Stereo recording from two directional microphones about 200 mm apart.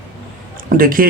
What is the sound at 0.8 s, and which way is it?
Speech, 45° right (ahead or behind).